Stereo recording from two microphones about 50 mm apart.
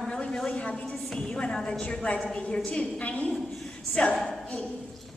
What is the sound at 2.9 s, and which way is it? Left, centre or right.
A woman's voice, left.